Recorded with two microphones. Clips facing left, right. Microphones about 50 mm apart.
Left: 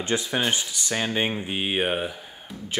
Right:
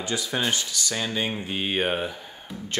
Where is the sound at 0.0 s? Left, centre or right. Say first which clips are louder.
Left 3 dB; left.